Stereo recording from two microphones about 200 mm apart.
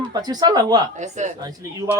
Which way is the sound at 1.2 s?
35° right (ahead or behind).